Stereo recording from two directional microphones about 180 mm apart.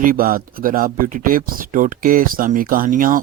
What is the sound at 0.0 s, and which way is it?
Speech, 50° right (ahead or behind).